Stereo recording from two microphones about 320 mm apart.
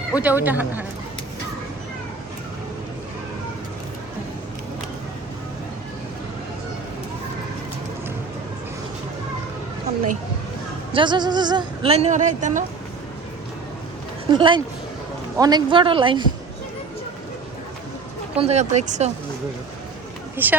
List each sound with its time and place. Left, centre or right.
0.1 s speech: centre
10.9 s speech: centre
14.3 s speech: centre
18.3 s speech: centre
20.3 s speech: centre